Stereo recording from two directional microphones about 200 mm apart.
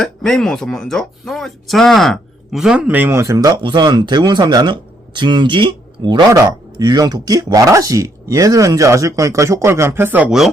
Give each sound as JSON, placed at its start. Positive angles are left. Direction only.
{"t": 0.0, "sound": "speech", "side_deg": 0}